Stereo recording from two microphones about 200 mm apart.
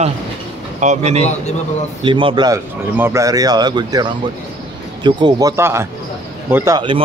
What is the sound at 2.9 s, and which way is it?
Speech, 15° right (ahead or behind).